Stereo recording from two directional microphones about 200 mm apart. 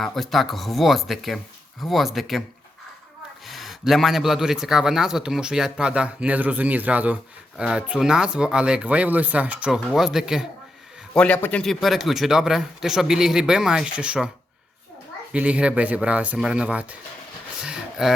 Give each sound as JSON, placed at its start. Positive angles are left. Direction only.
{"t": 0.0, "sound": "a man's voice", "side_deg": 0}
{"t": 3.4, "sound": "a man's voice", "side_deg": 0}
{"t": 15.3, "sound": "speech", "side_deg": -5}
{"t": 17.6, "sound": "a sound", "side_deg": 0}